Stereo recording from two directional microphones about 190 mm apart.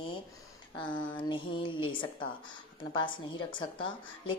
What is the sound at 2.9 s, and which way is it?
Speech, 25° left (ahead or behind).